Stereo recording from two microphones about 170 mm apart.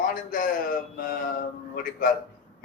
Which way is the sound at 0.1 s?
55° left (ahead or behind).